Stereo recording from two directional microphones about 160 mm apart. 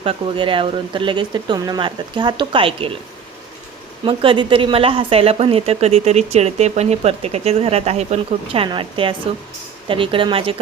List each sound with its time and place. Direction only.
0.0 s speech: 35° right (ahead or behind)
4.0 s speech: 35° right (ahead or behind)